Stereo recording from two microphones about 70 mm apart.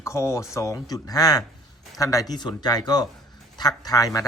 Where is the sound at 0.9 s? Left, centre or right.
Left.